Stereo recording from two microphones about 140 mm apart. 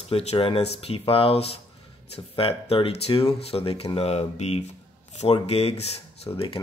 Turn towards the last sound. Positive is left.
turn(degrees=40)  # may be behind; listen again after turning